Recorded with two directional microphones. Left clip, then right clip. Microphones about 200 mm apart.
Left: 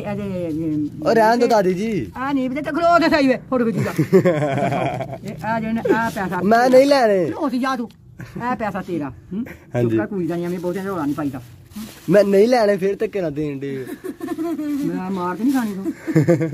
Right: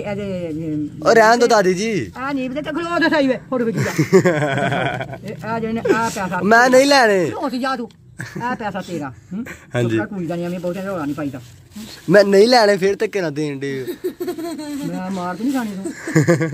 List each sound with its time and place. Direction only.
0.0 s speech: 10° right (ahead or behind)
2.1 s speech: 10° right (ahead or behind)
3.0 s a man's voice: 15° left (ahead or behind)
3.7 s speech: centre (ahead or behind)
5.4 s speech: 15° right (ahead or behind)
5.9 s speech: 5° right (ahead or behind)
7.3 s speech: 15° right (ahead or behind)
8.4 s a man's voice: 15° left (ahead or behind)
9.4 s speech: centre (ahead or behind)
10.1 s speech: 20° right (ahead or behind); by 13.8 s centre (ahead or behind)
14.2 s a sound: 50° right (ahead or behind)
15.0 s speech: 25° right (ahead or behind)
15.5 s speech: centre (ahead or behind)